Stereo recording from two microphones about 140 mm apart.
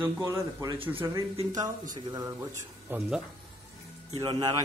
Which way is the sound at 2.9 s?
15° right (ahead or behind).